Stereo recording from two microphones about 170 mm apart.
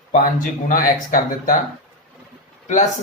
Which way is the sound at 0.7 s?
50° left (ahead or behind).